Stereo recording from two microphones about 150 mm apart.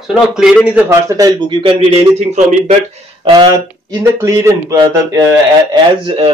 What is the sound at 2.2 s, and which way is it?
Speech, 45° right (ahead or behind).